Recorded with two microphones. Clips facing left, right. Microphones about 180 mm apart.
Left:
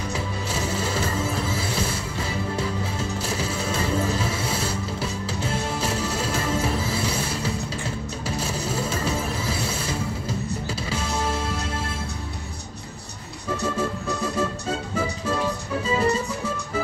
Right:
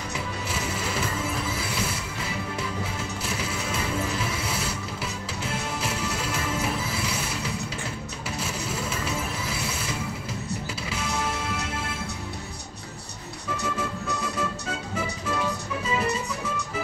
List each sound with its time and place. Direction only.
0.1 s music: 30° left (ahead or behind)
3.3 s music: 30° left (ahead or behind)
13.7 s music: 30° left (ahead or behind)